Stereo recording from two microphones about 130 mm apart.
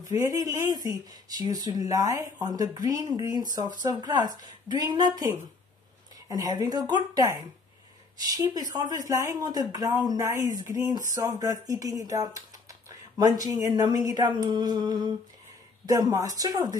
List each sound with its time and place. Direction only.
0.1 s speech: 30° right (ahead or behind)
6.2 s speech: 30° right (ahead or behind)